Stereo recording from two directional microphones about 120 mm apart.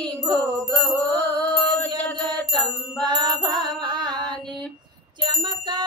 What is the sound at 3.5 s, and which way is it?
Music, 40° right (ahead or behind).